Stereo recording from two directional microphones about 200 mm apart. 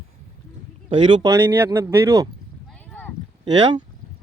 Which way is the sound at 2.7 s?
10° left (ahead or behind).